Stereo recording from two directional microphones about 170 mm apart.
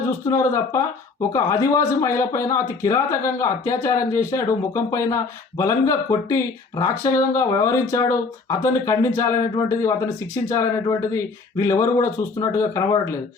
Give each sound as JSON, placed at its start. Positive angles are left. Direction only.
{"t": 0.3, "sound": "speech", "side_deg": 20}